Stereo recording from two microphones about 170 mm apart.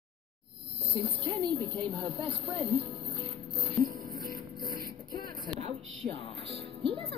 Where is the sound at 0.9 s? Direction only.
30° right (ahead or behind).